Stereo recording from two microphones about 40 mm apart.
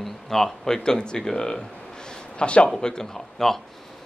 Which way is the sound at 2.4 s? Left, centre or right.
Left.